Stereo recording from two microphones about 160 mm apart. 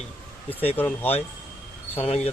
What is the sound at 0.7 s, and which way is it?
Speech, 10° left (ahead or behind).